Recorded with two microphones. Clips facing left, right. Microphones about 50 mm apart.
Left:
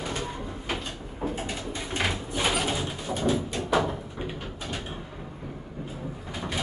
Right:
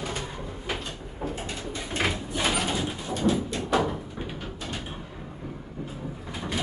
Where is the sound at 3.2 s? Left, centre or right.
Centre.